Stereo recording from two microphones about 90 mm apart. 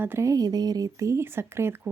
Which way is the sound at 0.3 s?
45° right (ahead or behind).